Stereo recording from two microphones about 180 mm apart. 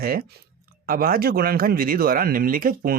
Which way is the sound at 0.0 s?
55° right (ahead or behind).